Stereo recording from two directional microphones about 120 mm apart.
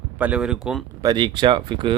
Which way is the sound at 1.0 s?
40° right (ahead or behind).